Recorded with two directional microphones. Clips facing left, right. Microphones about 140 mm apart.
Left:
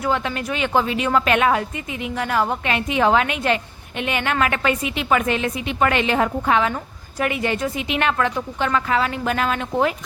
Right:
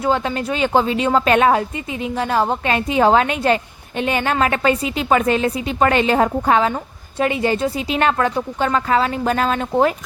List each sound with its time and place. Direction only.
0.0 s a woman's voice: 30° right (ahead or behind)